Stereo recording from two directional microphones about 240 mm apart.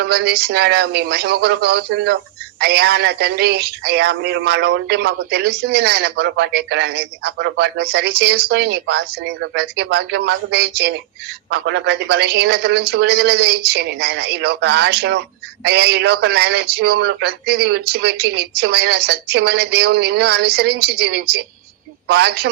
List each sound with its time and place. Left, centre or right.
0.0 s a man's voice: right